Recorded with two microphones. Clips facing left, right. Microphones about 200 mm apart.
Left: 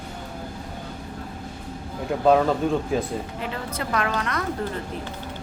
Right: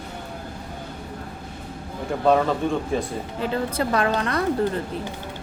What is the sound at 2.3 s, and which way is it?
Speech, 5° left (ahead or behind).